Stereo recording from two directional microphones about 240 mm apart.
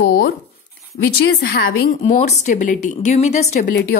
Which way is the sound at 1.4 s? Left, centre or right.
Left.